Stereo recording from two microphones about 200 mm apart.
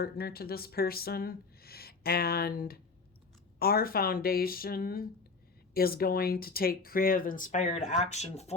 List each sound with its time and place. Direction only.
0.0 s speech: 50° left (ahead or behind); by 8.5 s 35° left (ahead or behind)